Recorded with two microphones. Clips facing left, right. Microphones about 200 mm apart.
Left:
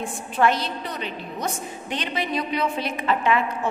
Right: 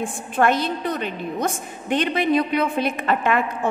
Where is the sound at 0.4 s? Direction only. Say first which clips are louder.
Right 2 dB; 50° right (ahead or behind).